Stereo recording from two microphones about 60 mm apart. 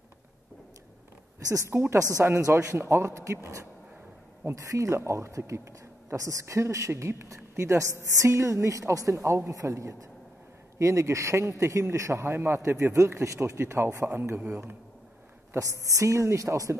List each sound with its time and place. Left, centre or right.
1.7 s a man's voice: right
2.2 s speech: right
2.6 s a man's voice: right
4.6 s a man's voice: right
14.4 s speech: right
15.5 s a man's voice: right